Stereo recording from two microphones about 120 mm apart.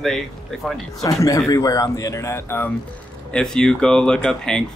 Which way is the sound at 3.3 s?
5° left (ahead or behind).